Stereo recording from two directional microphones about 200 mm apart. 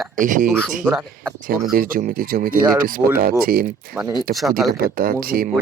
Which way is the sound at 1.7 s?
45° right (ahead or behind).